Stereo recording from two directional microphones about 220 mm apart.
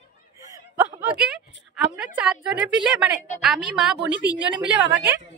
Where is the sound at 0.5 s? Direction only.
10° right (ahead or behind).